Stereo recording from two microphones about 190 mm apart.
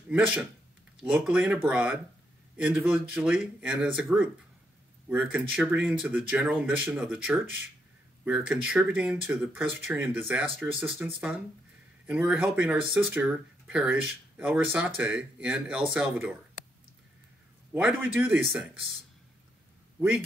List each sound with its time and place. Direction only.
0.1 s speech: 5° right (ahead or behind)
17.7 s speech: 5° right (ahead or behind)